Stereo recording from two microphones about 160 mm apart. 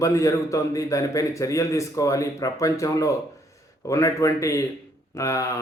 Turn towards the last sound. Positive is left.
turn(degrees=20)  # may be behind; listen again after turning